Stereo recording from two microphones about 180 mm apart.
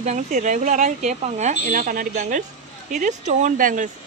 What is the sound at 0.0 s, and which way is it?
Speech, 40° right (ahead or behind).